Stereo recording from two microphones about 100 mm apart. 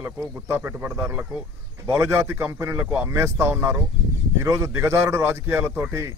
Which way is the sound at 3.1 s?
25° right (ahead or behind).